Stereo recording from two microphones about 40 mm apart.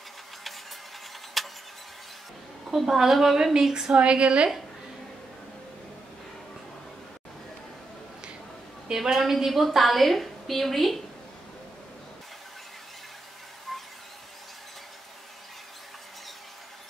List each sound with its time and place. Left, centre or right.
1.4 s vehicle: centre
2.7 s a woman's voice: centre
3.9 s a woman's voice: right
8.9 s a woman's voice: centre
13.7 s squeal: centre